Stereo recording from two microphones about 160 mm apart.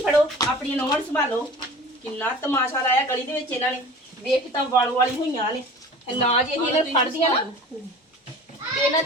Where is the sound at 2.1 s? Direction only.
15° left (ahead or behind).